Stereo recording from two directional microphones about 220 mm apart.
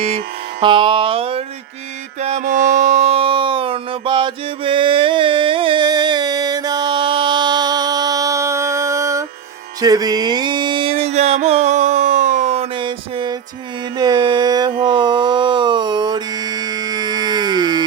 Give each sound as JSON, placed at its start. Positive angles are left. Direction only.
{"t": 0.6, "sound": "music", "side_deg": -20}
{"t": 2.2, "sound": "a sound", "side_deg": -35}
{"t": 9.8, "sound": "music", "side_deg": -15}